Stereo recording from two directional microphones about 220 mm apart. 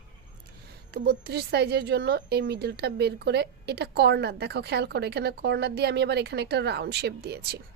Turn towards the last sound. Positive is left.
turn(degrees=-45)  # may be behind; listen again after turning